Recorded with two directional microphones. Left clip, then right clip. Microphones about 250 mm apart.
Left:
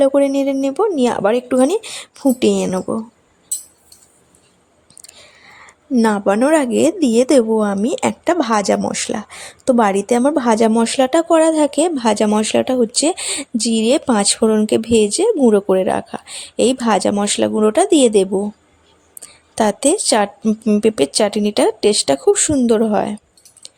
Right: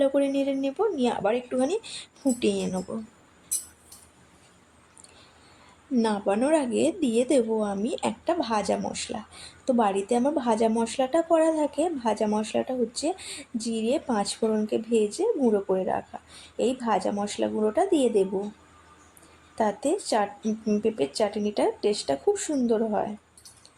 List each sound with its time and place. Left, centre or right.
0.0 s speech: left
5.9 s speech: left
19.5 s speech: left